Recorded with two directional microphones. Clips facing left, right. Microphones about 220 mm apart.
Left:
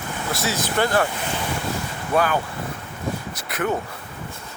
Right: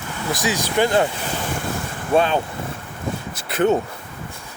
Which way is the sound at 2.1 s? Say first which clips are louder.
Right 3 dB; 25° right (ahead or behind).